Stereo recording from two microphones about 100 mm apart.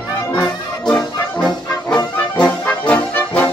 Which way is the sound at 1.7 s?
45° left (ahead or behind).